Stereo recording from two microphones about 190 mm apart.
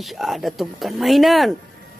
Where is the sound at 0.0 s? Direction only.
Centre (ahead or behind).